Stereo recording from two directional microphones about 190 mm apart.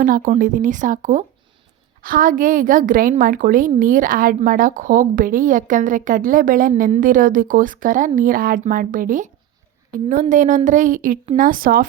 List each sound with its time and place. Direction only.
0.0 s a woman's voice: 45° right (ahead or behind)